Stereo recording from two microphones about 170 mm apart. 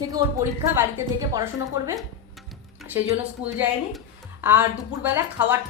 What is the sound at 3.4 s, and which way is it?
Speech, 10° right (ahead or behind).